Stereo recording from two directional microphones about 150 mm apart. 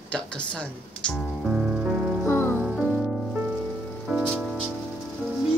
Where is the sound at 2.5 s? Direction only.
5° right (ahead or behind).